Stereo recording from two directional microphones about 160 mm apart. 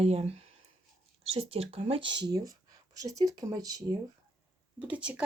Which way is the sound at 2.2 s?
25° right (ahead or behind).